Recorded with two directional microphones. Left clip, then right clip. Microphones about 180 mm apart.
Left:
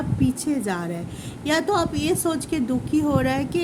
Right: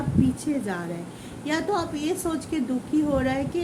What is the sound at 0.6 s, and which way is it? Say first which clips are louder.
A woman's voice: left 3 dB; 50° left (ahead or behind).